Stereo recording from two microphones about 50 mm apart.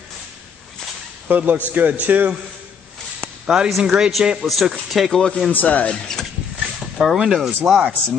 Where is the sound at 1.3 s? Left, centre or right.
Right.